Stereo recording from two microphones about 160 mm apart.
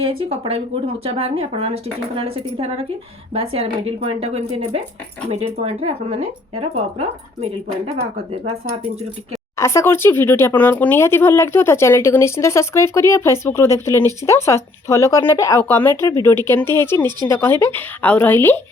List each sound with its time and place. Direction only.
0.0 s speech: 35° right (ahead or behind)
9.6 s speech: 15° left (ahead or behind)